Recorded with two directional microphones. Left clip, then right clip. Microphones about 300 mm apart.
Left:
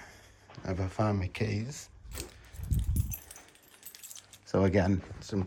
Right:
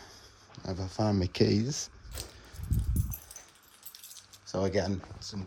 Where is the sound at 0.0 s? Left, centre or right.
Centre.